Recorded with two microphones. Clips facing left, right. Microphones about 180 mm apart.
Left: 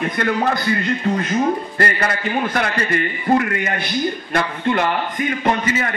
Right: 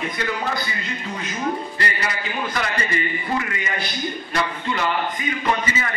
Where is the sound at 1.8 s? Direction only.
50° left (ahead or behind).